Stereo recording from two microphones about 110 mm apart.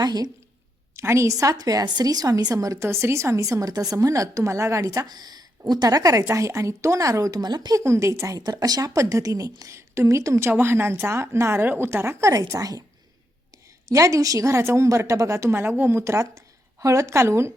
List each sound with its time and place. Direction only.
0.0 s a woman's voice: 35° right (ahead or behind)
0.9 s a woman's voice: 25° right (ahead or behind)
13.8 s a woman's voice: 30° right (ahead or behind)